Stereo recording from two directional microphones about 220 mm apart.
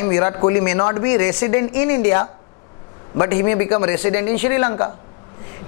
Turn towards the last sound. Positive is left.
turn(degrees=20)  # may be behind; listen again after turning